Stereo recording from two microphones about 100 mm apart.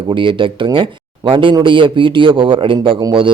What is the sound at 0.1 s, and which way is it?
Speech, 55° right (ahead or behind).